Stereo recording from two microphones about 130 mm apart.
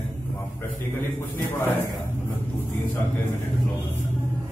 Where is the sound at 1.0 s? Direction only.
15° left (ahead or behind).